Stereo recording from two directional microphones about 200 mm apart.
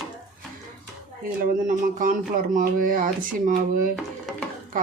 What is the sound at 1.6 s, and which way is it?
Speech, 40° right (ahead or behind).